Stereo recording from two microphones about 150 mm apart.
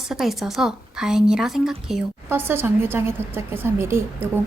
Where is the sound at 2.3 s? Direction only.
15° right (ahead or behind).